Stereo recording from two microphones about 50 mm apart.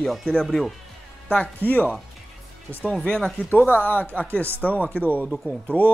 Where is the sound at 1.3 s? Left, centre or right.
Left.